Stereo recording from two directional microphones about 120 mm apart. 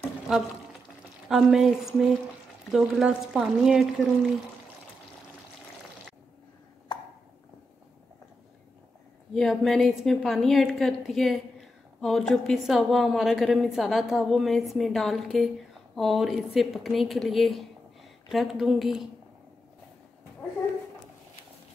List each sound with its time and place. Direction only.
1.3 s a woman's voice: centre (ahead or behind)
9.3 s a woman's voice: centre (ahead or behind)